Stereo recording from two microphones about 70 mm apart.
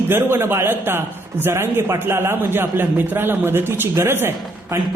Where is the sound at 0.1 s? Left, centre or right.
Right.